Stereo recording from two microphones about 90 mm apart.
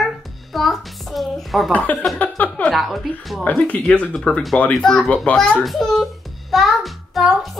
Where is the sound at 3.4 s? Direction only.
15° left (ahead or behind).